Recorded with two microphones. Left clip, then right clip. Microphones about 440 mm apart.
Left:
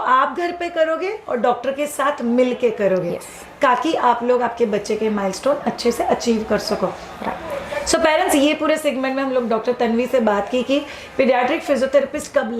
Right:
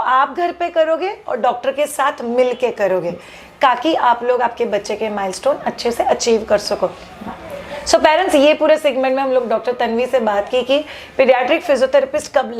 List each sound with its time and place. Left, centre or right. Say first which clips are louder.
0.0 s a woman's voice: right 2 dB; right
7.9 s a woman's voice: right 4 dB; right